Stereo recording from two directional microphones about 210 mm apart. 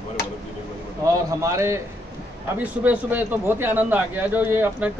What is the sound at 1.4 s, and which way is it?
A man's voice, 15° right (ahead or behind).